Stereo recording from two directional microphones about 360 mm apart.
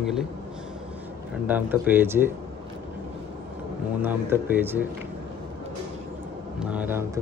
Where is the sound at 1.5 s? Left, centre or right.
Centre.